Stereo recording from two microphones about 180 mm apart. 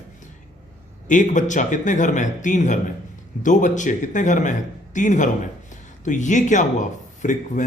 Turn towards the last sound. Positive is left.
turn(degrees=45)  # may be behind; listen again after turning